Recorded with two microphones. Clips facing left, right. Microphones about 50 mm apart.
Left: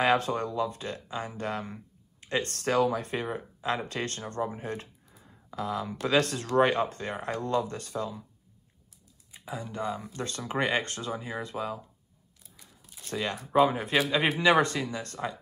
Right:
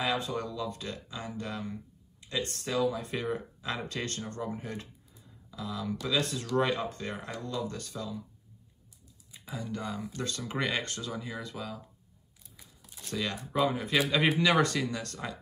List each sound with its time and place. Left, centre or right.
0.0 s speech: left
3.1 s speech: left
5.9 s speech: left
9.5 s speech: left
12.5 s a sound: centre
13.0 s speech: left
14.6 s speech: centre